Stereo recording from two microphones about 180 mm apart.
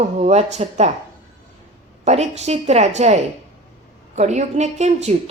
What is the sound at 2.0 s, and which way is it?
A woman's voice, 40° right (ahead or behind).